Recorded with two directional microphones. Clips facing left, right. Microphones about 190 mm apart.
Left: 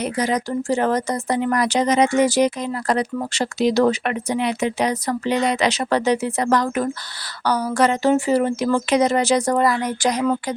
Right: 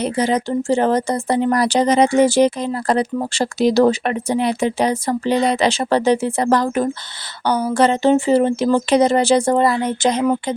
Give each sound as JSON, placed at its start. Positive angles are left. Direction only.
{"t": 0.0, "sound": "speech", "side_deg": -30}